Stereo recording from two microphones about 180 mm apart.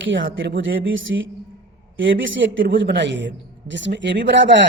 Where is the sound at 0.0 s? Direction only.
90° right.